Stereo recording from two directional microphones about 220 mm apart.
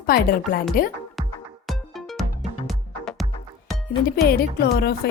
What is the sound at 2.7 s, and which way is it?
Music, centre (ahead or behind).